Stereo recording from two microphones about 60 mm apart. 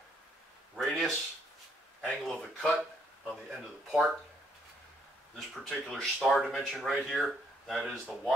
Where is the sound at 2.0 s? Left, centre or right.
Centre.